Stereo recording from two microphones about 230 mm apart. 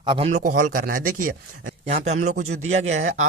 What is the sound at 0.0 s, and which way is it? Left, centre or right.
A man's voice, right.